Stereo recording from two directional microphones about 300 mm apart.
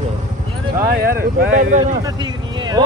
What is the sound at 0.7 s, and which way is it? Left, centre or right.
Speech, right.